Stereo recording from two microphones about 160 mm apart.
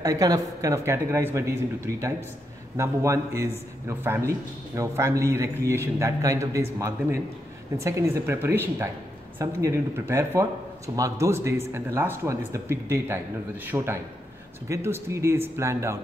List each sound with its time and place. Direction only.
0.0 s a man's voice: 20° right (ahead or behind)